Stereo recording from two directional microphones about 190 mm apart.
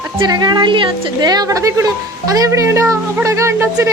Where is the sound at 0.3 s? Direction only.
20° right (ahead or behind).